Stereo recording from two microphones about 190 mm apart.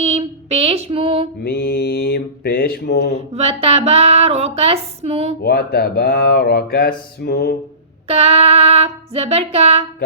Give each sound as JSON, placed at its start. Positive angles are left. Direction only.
{"t": 0.0, "sound": "a sound", "side_deg": -35}
{"t": 1.4, "sound": "speech", "side_deg": 55}
{"t": 3.2, "sound": "speech", "side_deg": -30}
{"t": 5.4, "sound": "speech", "side_deg": 55}
{"t": 8.0, "sound": "speech", "side_deg": -30}